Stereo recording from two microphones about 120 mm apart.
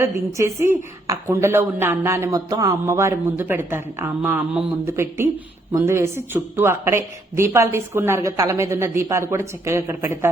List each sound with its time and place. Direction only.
0.0 s a woman's voice: 25° right (ahead or behind)